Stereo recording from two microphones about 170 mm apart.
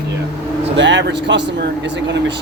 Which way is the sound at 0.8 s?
90° right.